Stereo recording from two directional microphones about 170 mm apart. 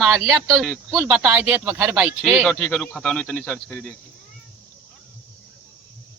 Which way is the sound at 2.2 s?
Centre (ahead or behind).